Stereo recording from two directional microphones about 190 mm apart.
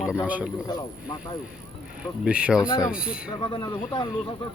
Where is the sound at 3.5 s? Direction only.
25° left (ahead or behind).